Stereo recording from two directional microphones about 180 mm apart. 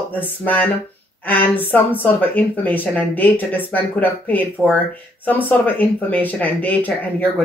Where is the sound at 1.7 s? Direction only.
10° left (ahead or behind).